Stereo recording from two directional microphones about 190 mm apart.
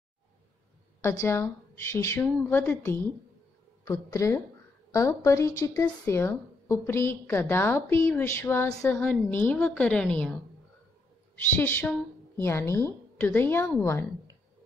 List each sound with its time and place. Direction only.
1.0 s a woman's voice: 15° left (ahead or behind)
11.5 s a woman's voice: 10° left (ahead or behind)